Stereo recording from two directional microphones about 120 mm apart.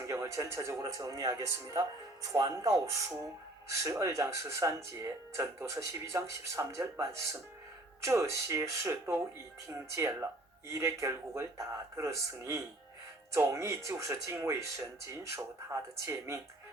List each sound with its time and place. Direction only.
0.1 s speech: 25° right (ahead or behind)